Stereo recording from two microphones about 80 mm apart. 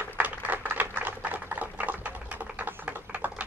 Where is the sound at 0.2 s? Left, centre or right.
Right.